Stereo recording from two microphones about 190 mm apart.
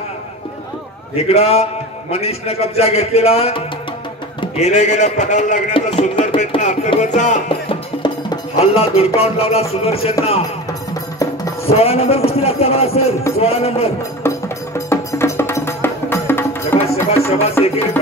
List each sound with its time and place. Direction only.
1.1 s speech: 35° left (ahead or behind)
8.0 s music: 30° left (ahead or behind)
11.6 s speech: 30° left (ahead or behind)
14.2 s music: 15° left (ahead or behind)
16.8 s music: 30° left (ahead or behind)
17.3 s speech: 35° left (ahead or behind)